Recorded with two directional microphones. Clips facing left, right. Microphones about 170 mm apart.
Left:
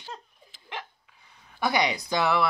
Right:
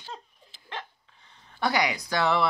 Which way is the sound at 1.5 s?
10° left (ahead or behind).